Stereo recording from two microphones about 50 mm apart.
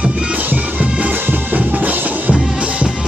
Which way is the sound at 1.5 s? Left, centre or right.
Right.